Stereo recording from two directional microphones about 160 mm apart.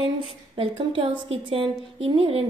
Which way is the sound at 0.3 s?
30° right (ahead or behind).